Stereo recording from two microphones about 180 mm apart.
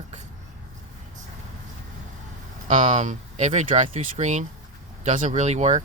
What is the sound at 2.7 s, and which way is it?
Speech, 40° right (ahead or behind).